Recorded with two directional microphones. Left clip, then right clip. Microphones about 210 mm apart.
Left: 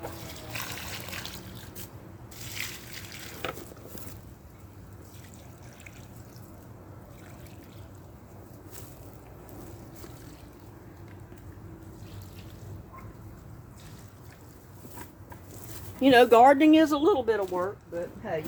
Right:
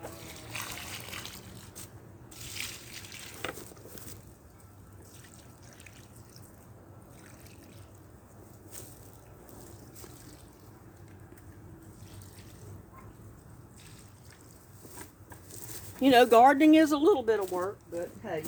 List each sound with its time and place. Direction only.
0.0 s water: centre (ahead or behind)
2.4 s a sound: 10° right (ahead or behind)
15.5 s speech: 30° right (ahead or behind); by 18.3 s 45° right (ahead or behind)